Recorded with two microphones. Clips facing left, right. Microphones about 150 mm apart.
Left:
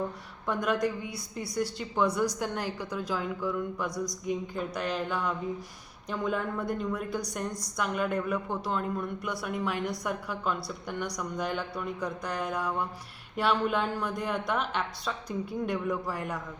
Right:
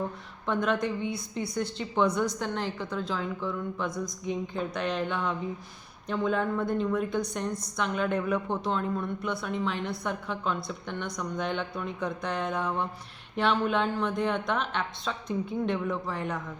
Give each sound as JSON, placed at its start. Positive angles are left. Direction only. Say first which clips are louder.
{"t": 0.4, "sound": "speech", "louder": "right 1 dB", "side_deg": 10}
{"t": 3.8, "sound": "mantra", "louder": "even", "side_deg": 35}
{"t": 4.3, "sound": "speech", "louder": "right 2 dB", "side_deg": 5}